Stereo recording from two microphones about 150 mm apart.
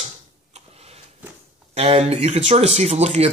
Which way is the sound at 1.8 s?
45° right (ahead or behind).